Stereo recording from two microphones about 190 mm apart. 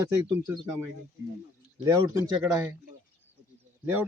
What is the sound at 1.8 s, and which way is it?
Speech, 15° right (ahead or behind).